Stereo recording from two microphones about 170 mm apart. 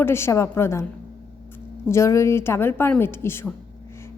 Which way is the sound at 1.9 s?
15° left (ahead or behind).